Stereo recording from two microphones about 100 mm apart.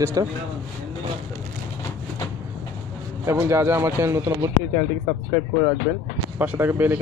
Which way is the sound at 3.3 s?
25° right (ahead or behind).